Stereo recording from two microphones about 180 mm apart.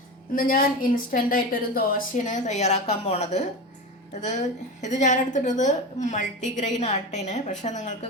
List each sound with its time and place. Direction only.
0.3 s a woman's voice: 50° left (ahead or behind)